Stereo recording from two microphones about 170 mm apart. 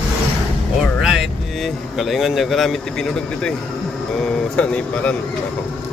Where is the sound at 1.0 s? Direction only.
5° right (ahead or behind).